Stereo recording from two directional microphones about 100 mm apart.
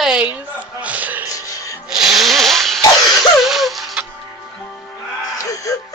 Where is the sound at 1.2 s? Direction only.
35° left (ahead or behind).